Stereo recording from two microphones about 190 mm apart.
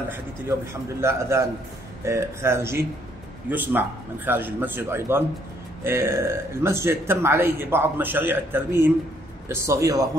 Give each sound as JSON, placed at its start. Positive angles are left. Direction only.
{"t": 1.0, "sound": "a man's voice", "side_deg": -15}